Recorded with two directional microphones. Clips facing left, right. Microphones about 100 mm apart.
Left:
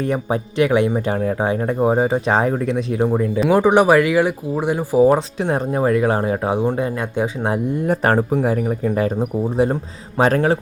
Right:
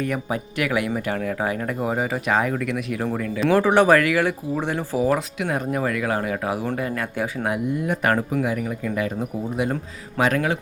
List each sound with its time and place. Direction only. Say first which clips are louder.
0.0 s speech: left 5 dB; 30° left (ahead or behind); by 4.9 s 15° left (ahead or behind)
4.9 s speech: left 8 dB; 30° left (ahead or behind)